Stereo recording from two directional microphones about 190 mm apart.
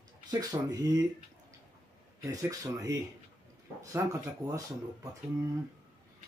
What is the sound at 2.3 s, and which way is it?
Speech, 20° right (ahead or behind).